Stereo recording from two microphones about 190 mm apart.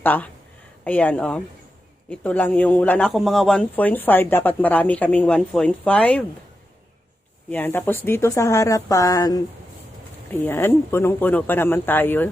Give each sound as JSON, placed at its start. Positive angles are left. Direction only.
{"t": 0.0, "sound": "a man's voice", "side_deg": 10}
{"t": 7.5, "sound": "a man's voice", "side_deg": 10}